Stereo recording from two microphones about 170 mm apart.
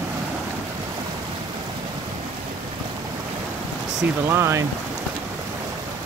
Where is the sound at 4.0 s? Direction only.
15° right (ahead or behind).